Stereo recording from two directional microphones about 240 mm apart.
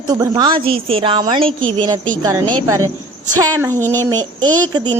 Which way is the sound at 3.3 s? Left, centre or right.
Centre.